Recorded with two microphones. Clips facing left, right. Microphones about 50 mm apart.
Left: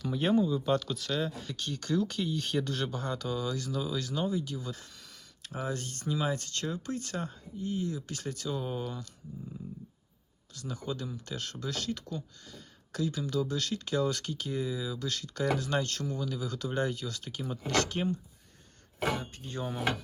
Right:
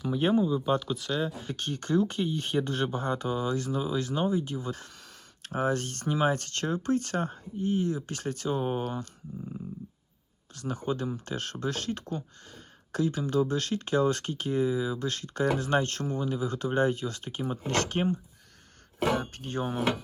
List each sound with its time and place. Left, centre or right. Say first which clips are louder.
0.0 s speech: right 2 dB; centre
1.3 s speech: right 3 dB; right
1.5 s speech: right 4 dB; right
10.5 s speech: right 6 dB; right
19.3 s speech: right 6 dB; right